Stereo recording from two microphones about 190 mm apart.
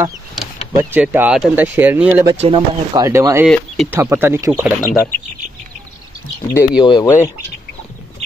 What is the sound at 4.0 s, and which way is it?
Speech, 15° right (ahead or behind).